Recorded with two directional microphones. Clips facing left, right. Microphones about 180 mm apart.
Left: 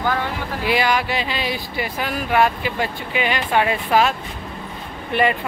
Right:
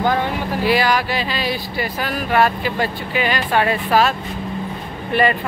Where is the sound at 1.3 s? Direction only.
15° left (ahead or behind).